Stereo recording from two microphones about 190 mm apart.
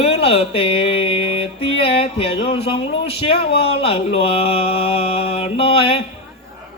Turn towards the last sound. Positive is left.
turn(degrees=30)  # may be behind; listen again after turning